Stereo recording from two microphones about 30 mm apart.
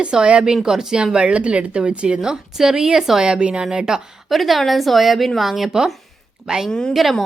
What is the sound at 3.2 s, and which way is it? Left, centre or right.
Speech, right.